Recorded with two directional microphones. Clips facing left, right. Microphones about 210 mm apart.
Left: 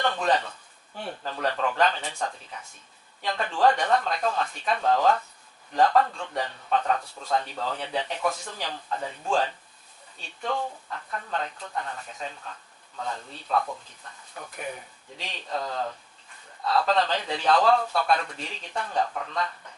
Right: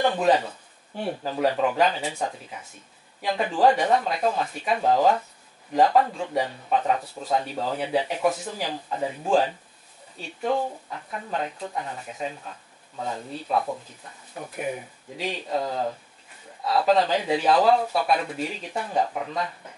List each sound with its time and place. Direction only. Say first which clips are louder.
0.0 s speech: right 4 dB; 10° right (ahead or behind)
8.2 s speech: right 5 dB; 20° right (ahead or behind)
10.9 s speech: right 1 dB; 10° right (ahead or behind)